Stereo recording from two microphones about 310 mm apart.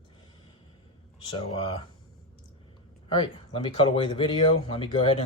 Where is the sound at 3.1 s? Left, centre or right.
Centre.